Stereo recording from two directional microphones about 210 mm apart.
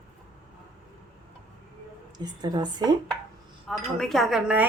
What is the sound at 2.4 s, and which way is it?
Speech, 20° right (ahead or behind).